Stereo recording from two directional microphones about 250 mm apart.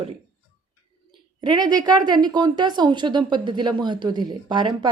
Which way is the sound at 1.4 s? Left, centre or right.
Centre.